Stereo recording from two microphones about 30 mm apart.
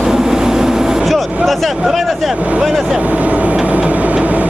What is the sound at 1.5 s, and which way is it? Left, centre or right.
Speech, centre.